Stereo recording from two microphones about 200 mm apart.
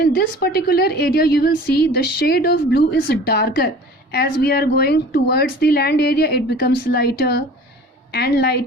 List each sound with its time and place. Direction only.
0.0 s a woman's voice: 50° left (ahead or behind)